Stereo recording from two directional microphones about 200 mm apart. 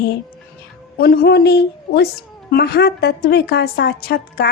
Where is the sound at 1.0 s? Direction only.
50° left (ahead or behind).